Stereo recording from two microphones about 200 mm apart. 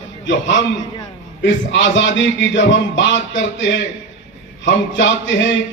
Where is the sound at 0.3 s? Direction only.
65° left (ahead or behind).